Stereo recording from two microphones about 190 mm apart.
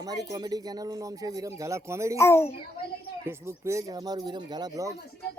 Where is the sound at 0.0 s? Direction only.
20° right (ahead or behind).